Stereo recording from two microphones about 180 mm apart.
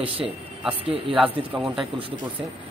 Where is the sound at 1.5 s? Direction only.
Centre (ahead or behind).